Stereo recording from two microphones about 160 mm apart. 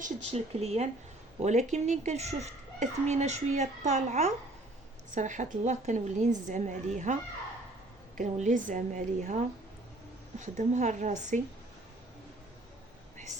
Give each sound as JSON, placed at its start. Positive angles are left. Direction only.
{"t": 0.3, "sound": "a child's voice", "side_deg": -40}
{"t": 10.4, "sound": "a child's voice", "side_deg": -50}